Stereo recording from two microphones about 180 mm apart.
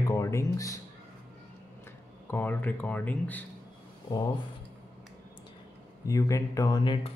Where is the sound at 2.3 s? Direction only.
10° left (ahead or behind).